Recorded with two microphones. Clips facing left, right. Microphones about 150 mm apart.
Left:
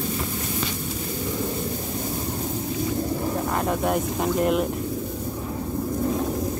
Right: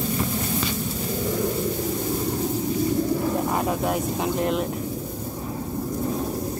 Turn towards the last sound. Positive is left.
turn(degrees=0)  # may be behind; listen again after turning